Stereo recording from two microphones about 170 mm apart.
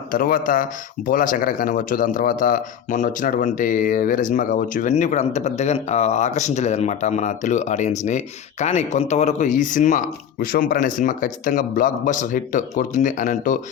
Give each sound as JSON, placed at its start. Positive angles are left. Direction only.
{"t": 0.1, "sound": "speech", "side_deg": 55}